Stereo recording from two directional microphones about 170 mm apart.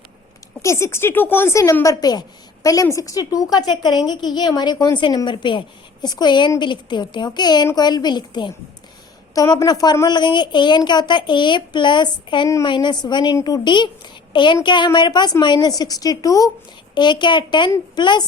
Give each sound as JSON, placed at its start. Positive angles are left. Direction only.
{"t": 0.6, "sound": "a woman's voice", "side_deg": 15}